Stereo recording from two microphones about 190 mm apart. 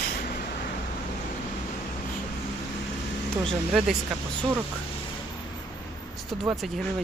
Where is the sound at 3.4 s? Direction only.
Centre (ahead or behind).